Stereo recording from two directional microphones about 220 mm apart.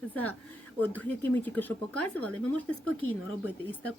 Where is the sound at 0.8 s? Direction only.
5° left (ahead or behind).